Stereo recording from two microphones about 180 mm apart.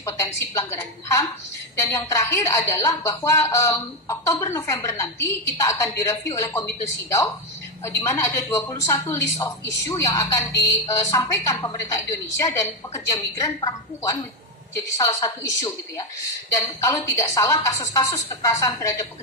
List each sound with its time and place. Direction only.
0.0 s a woman's voice: 15° left (ahead or behind)